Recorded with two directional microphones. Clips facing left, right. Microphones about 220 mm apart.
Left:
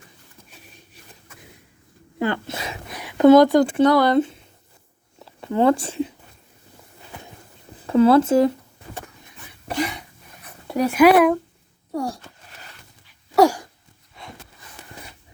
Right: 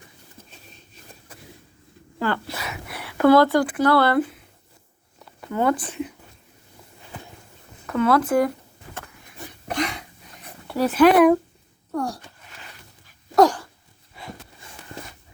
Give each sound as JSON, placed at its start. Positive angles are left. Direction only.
{"t": 2.1, "sound": "speech", "side_deg": 20}
{"t": 7.9, "sound": "speech", "side_deg": 30}
{"t": 9.6, "sound": "a sound", "side_deg": 0}
{"t": 10.7, "sound": "speech", "side_deg": 15}
{"t": 13.3, "sound": "dog", "side_deg": 10}
{"t": 14.2, "sound": "a sound", "side_deg": -5}